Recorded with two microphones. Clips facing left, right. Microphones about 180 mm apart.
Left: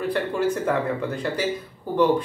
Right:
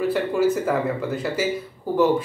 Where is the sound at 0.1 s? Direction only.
5° right (ahead or behind).